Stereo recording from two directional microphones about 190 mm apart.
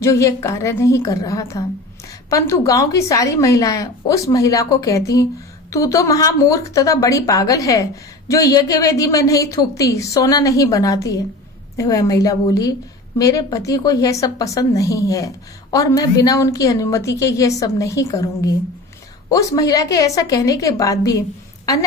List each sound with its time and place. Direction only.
0.0 s a woman's voice: 15° left (ahead or behind)